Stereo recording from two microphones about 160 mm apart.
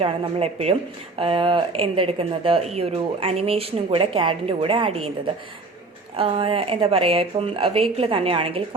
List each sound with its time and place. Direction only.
0.0 s speech: 40° right (ahead or behind)